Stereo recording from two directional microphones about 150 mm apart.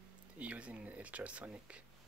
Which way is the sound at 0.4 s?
10° right (ahead or behind).